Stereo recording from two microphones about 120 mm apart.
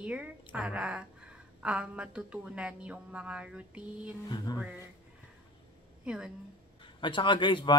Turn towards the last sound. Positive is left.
turn(degrees=40)  # may be behind; listen again after turning